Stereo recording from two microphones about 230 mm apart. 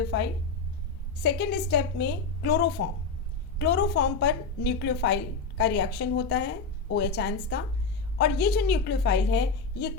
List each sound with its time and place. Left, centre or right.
1.2 s a woman's voice: left